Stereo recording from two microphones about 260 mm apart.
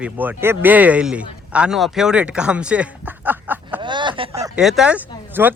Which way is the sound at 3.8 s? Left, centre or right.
Centre.